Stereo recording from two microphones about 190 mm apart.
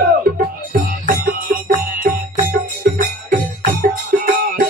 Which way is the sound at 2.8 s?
45° right (ahead or behind).